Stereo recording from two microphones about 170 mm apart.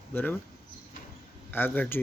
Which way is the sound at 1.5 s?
10° left (ahead or behind).